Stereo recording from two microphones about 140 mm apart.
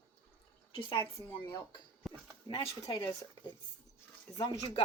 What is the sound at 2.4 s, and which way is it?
Speech, 35° left (ahead or behind).